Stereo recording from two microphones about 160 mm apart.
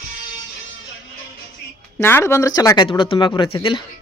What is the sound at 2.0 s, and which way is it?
Speech, 15° left (ahead or behind).